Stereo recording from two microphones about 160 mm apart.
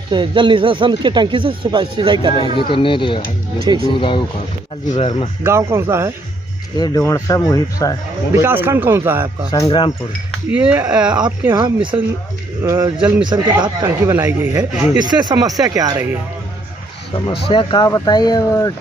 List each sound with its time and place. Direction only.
0.1 s speech: 30° right (ahead or behind)
2.7 s speech: 30° left (ahead or behind)
4.8 s speech: 45° left (ahead or behind)
5.4 s speech: 15° right (ahead or behind)
6.8 s speech: 20° left (ahead or behind)
8.3 s speech: 15° right (ahead or behind)
9.5 s speech: 25° left (ahead or behind)
10.5 s speech: 10° right (ahead or behind)
11.5 s speech: 30° right (ahead or behind)
12.6 s speech: 15° right (ahead or behind)
13.2 s speech: 25° right (ahead or behind)
17.3 s speech: 30° left (ahead or behind)